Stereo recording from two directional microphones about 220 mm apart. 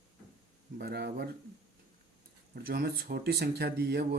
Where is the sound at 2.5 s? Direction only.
45° right (ahead or behind).